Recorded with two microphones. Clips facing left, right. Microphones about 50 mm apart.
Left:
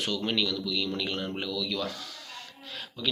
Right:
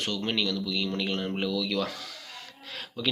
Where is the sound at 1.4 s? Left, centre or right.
Right.